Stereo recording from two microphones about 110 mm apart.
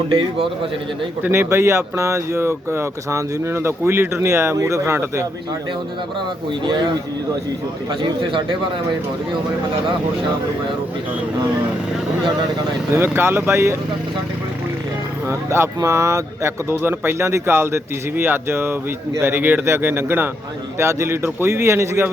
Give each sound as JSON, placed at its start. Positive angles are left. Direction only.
{"t": 1.2, "sound": "speech", "side_deg": -25}
{"t": 12.9, "sound": "speech", "side_deg": -20}
{"t": 15.3, "sound": "speech", "side_deg": -25}